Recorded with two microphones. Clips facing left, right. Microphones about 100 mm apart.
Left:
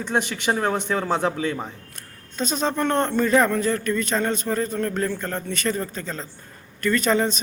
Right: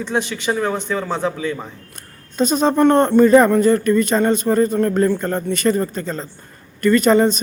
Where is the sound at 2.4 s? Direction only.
10° right (ahead or behind).